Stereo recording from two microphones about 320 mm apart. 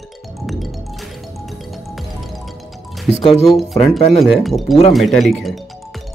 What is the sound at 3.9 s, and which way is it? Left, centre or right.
Speech, centre.